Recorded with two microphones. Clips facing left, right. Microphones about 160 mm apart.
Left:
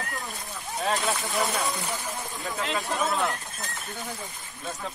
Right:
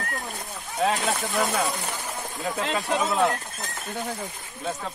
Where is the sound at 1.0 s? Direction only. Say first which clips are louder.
Right 2 dB; 55° right (ahead or behind).